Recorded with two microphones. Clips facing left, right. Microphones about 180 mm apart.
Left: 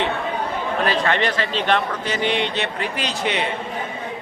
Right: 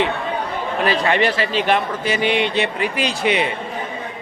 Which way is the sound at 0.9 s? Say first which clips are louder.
Right 4 dB; 10° right (ahead or behind).